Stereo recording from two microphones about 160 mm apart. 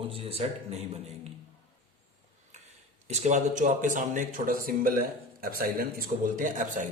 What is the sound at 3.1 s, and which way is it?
Speech, 45° right (ahead or behind).